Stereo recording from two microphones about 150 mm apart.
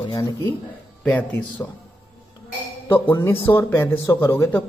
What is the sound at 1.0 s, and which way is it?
Speech, 10° left (ahead or behind).